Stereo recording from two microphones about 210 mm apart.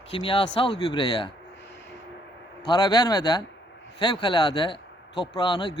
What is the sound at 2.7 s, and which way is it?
Speech, 20° left (ahead or behind).